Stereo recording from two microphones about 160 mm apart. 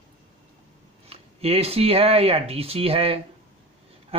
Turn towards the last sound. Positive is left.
turn(degrees=-35)  # may be behind; listen again after turning